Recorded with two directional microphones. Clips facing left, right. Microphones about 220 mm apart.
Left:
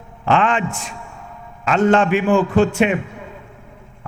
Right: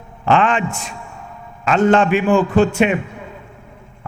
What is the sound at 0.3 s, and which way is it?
A man's voice, 15° right (ahead or behind).